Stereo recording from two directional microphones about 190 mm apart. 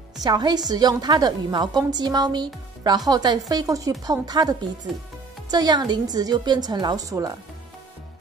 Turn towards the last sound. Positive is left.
turn(degrees=-15)  # may be behind; listen again after turning